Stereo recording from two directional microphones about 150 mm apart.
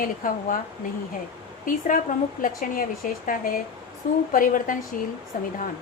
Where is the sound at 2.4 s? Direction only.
65° left (ahead or behind).